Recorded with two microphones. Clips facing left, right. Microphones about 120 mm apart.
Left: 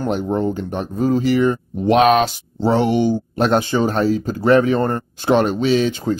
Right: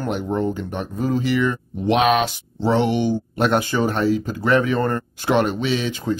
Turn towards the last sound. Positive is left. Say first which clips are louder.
# left 5 dB
turn(degrees=35)  # may be behind; listen again after turning